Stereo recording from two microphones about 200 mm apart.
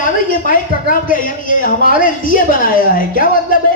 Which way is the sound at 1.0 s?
45° left (ahead or behind).